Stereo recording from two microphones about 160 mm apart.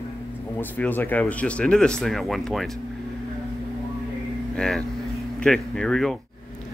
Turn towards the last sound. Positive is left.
turn(degrees=0)  # may be behind; listen again after turning